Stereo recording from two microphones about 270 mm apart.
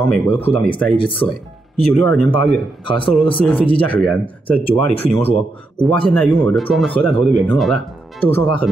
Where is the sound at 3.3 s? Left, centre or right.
Centre.